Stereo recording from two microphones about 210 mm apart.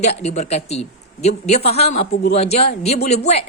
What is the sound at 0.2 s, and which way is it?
A woman's voice, 30° left (ahead or behind).